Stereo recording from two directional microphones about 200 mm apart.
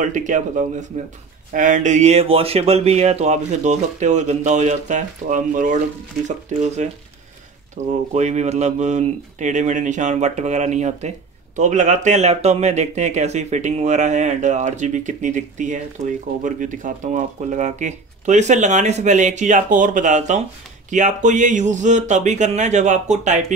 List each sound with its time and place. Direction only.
0.0 s speech: 40° right (ahead or behind)